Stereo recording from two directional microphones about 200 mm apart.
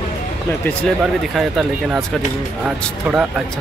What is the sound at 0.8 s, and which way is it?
Speech, centre (ahead or behind).